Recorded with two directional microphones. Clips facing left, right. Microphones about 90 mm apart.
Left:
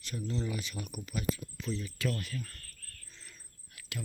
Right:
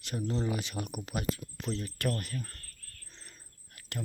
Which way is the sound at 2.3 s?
25° right (ahead or behind).